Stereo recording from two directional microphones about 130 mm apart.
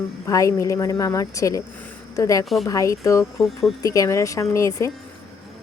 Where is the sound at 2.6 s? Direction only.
25° left (ahead or behind).